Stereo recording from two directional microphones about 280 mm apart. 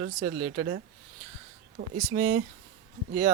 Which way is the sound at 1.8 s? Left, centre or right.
Right.